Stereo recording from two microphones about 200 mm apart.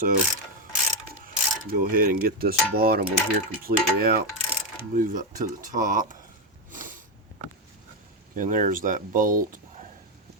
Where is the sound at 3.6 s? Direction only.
45° right (ahead or behind).